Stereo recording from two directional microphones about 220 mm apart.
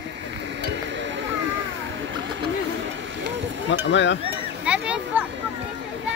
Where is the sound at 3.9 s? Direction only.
55° left (ahead or behind).